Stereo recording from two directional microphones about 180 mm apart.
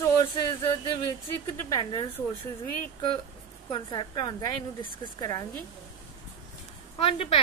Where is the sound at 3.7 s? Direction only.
25° left (ahead or behind).